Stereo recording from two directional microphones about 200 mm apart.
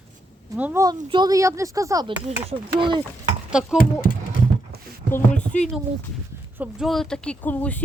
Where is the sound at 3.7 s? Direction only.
45° left (ahead or behind).